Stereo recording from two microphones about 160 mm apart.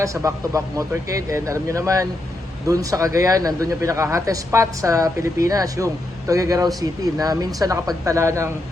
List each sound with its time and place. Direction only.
0.0 s speech: 20° right (ahead or behind)